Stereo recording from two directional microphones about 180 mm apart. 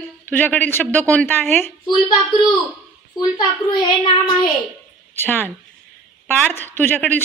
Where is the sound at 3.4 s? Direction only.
25° left (ahead or behind).